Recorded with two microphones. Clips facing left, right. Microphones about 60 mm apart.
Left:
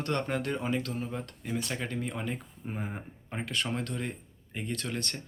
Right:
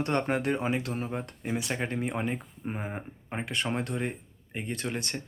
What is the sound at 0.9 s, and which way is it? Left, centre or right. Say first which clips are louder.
Speech: right 2 dB; right.